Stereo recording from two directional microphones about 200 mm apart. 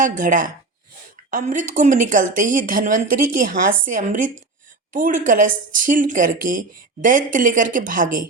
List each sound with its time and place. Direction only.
0.0 s speech: 40° right (ahead or behind)